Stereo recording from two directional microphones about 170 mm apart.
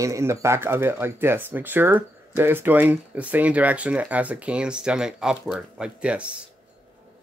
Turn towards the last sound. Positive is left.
turn(degrees=-5)  # may be behind; listen again after turning